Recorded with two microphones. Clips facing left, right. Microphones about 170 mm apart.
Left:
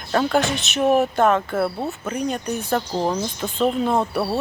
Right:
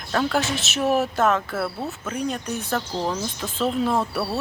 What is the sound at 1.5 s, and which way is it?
Speech, 15° left (ahead or behind).